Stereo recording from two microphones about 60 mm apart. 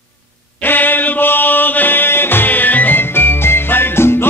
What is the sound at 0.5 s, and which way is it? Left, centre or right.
Music, left.